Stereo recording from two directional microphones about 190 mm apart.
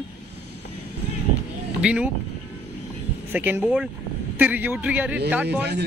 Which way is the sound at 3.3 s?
10° right (ahead or behind).